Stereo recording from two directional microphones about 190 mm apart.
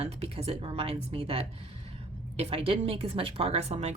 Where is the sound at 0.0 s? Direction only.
35° right (ahead or behind).